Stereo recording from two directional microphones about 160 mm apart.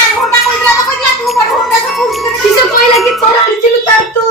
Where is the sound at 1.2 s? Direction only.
Centre (ahead or behind).